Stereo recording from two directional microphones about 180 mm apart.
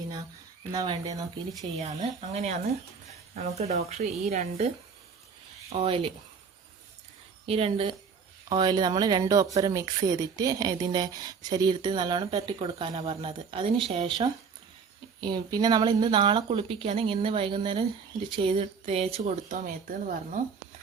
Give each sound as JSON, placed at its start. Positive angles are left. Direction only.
{"t": 0.7, "sound": "speech", "side_deg": -20}
{"t": 1.8, "sound": "speech", "side_deg": -40}
{"t": 5.7, "sound": "speech", "side_deg": -30}
{"t": 7.4, "sound": "speech", "side_deg": -35}
{"t": 15.2, "sound": "speech", "side_deg": -25}